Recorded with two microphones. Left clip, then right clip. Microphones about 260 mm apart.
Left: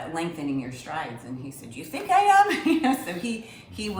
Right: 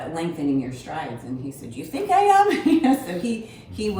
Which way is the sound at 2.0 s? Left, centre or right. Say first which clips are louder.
Right 2 dB; centre.